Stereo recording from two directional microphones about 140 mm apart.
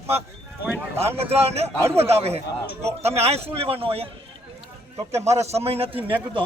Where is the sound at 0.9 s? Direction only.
45° right (ahead or behind).